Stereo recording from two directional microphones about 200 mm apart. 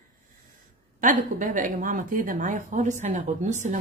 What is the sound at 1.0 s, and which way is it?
Speech, 40° right (ahead or behind).